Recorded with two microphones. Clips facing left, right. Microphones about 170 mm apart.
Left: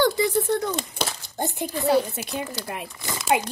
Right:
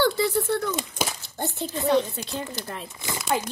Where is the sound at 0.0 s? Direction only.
15° left (ahead or behind).